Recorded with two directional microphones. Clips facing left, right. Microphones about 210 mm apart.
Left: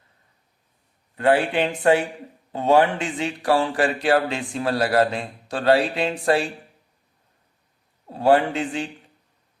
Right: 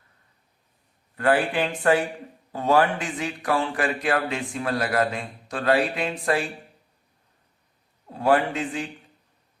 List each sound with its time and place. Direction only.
1.1 s speech: 25° left (ahead or behind)
8.1 s speech: 30° left (ahead or behind)